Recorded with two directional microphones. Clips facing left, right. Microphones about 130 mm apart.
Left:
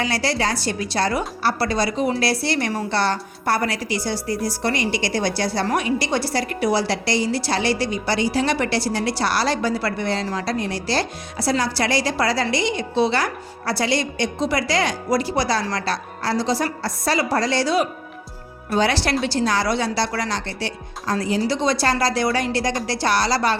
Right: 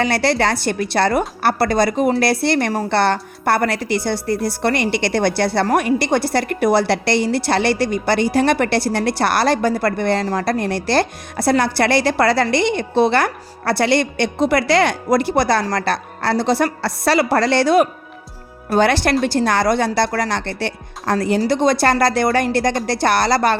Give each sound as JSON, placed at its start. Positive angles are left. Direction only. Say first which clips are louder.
{"t": 0.0, "sound": "a woman's voice", "louder": "right 5 dB", "side_deg": -60}